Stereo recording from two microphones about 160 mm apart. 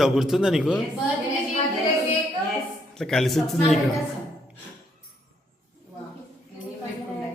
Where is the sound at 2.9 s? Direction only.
5° left (ahead or behind).